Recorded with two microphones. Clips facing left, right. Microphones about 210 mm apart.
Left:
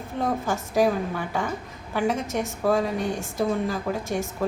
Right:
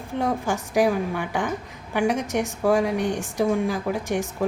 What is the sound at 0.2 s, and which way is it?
A woman's voice, 15° right (ahead or behind).